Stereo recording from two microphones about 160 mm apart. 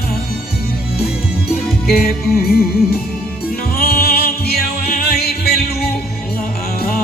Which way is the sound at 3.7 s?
75° left (ahead or behind).